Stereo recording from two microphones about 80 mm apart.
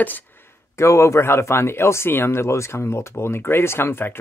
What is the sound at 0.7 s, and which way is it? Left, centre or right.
Speech, left.